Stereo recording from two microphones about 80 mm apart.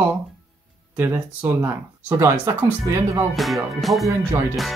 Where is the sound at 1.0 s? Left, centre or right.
Right.